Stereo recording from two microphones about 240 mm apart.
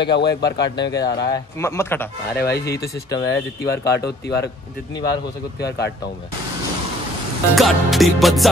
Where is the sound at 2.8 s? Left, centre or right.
Left.